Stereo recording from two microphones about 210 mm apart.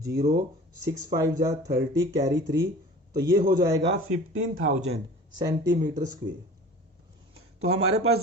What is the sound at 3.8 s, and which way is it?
Speech, 75° right (ahead or behind).